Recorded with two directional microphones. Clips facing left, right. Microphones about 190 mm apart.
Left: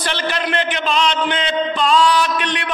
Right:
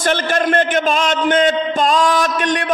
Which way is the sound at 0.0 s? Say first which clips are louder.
Right 5 dB; 45° right (ahead or behind).